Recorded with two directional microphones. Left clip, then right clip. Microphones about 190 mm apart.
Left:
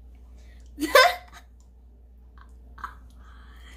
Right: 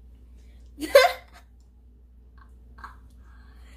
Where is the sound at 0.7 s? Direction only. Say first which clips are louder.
Even; 35° left (ahead or behind).